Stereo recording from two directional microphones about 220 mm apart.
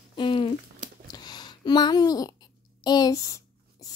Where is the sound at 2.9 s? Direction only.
15° left (ahead or behind).